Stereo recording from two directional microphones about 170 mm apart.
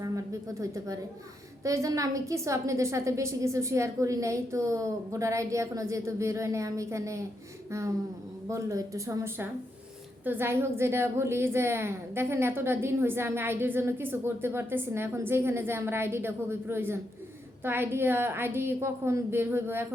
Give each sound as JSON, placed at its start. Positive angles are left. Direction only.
{"t": 1.6, "sound": "a woman's voice", "side_deg": -20}